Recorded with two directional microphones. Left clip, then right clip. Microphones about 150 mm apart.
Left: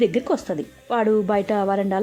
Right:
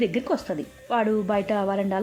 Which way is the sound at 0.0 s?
30° left (ahead or behind).